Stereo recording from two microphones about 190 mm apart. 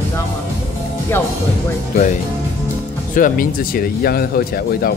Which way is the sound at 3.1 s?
45° left (ahead or behind).